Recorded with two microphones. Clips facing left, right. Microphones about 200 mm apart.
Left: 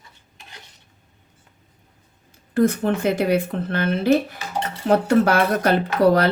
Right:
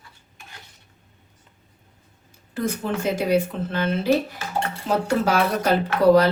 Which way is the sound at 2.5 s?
60° left (ahead or behind).